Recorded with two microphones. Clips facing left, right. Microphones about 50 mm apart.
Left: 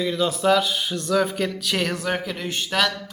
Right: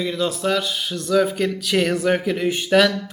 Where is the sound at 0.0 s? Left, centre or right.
Centre.